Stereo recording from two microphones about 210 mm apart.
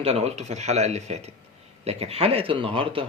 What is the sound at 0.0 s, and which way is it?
Speech, 30° right (ahead or behind).